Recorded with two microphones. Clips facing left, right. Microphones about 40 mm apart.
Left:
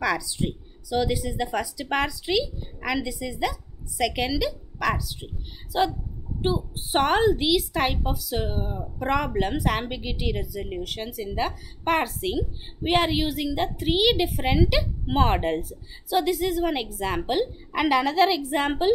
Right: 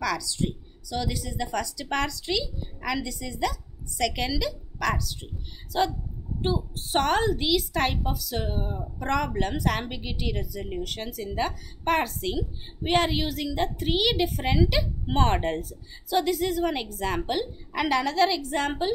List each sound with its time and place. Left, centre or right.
0.0 s a woman's voice: left